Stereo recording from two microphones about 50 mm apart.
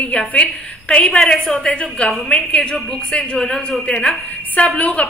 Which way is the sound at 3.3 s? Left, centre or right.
Centre.